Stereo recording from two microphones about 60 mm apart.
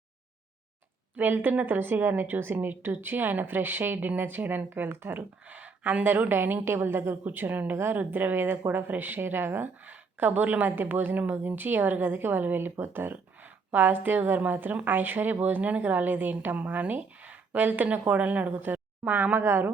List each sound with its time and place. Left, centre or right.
1.1 s a woman's voice: right